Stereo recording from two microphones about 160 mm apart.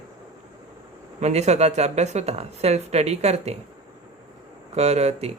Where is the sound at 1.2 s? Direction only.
45° right (ahead or behind).